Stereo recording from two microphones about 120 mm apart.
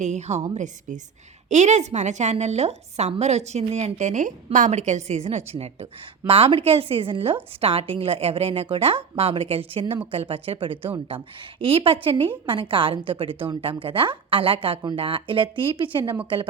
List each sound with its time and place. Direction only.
0.0 s a woman's voice: 70° right (ahead or behind); by 16.1 s 45° right (ahead or behind)